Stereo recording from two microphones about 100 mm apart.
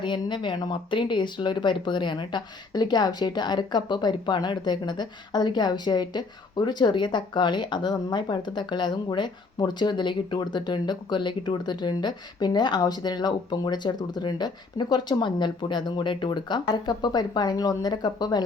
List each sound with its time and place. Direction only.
0.0 s speech: 50° left (ahead or behind)